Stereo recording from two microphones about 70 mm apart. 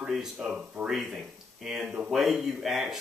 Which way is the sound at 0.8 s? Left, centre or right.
Right.